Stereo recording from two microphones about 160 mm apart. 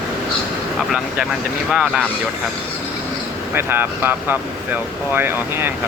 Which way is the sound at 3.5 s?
15° right (ahead or behind).